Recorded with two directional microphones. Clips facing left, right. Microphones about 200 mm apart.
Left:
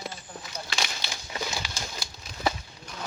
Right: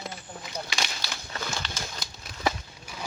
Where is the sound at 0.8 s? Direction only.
15° left (ahead or behind).